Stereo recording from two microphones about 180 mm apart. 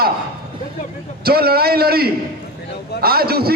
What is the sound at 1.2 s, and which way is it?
A man's voice, 60° right (ahead or behind).